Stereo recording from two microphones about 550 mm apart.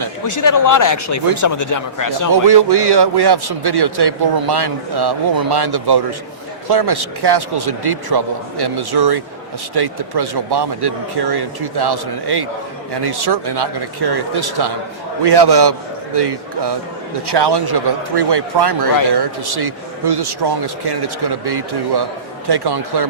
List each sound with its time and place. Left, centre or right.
0.3 s speech: left
2.5 s a man's voice: right